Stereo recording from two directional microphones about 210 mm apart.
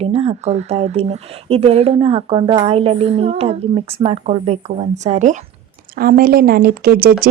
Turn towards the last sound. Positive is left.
turn(degrees=-45)  # may be behind; listen again after turning